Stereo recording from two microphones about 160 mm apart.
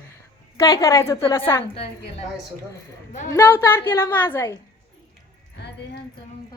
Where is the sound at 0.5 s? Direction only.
20° left (ahead or behind).